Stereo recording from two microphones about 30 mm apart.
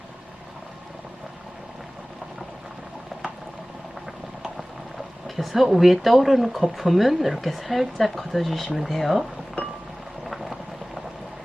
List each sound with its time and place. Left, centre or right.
5.4 s speech: centre
9.6 s music: left
10.2 s boiling: centre